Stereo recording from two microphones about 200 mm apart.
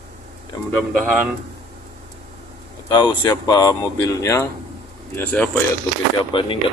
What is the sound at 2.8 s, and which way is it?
Speech, 20° left (ahead or behind).